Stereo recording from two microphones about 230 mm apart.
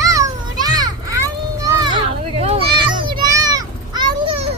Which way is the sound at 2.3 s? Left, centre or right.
Right.